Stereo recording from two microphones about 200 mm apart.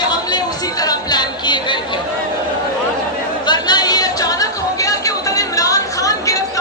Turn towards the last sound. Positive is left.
turn(degrees=15)  # may be behind; listen again after turning